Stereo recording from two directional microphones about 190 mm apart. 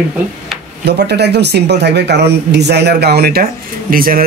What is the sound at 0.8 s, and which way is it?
Speech, 60° right (ahead or behind).